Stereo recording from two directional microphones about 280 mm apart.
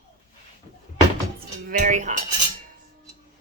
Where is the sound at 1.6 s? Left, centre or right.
Right.